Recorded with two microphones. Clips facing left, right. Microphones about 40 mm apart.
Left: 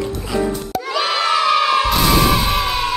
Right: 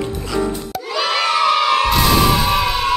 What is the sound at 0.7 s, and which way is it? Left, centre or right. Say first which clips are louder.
Children shouting: left 3 dB; centre.